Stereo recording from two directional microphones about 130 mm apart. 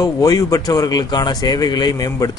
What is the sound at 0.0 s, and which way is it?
A man's voice, 30° left (ahead or behind).